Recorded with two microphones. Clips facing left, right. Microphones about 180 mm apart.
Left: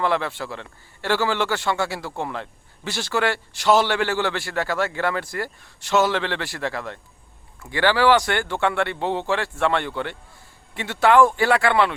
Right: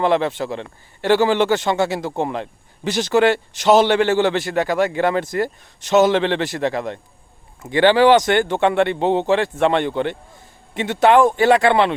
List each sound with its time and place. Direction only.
0.0 s a man's voice: 20° right (ahead or behind)